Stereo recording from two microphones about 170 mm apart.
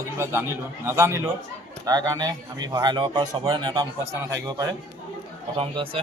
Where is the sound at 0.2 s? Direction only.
15° right (ahead or behind).